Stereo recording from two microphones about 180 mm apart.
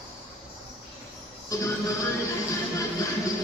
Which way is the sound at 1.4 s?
15° left (ahead or behind).